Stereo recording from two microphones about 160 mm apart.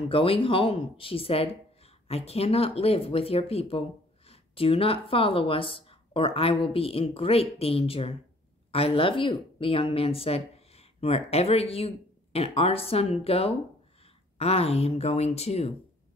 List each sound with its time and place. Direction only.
0.1 s speech: 35° left (ahead or behind)